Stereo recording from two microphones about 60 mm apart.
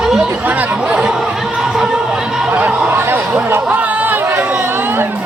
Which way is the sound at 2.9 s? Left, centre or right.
Right.